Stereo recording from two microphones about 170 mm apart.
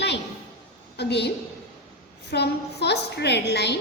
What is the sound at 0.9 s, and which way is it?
Speech, 80° left.